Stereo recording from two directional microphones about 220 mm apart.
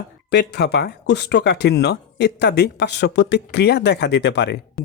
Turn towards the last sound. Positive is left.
turn(degrees=50)  # may be behind; listen again after turning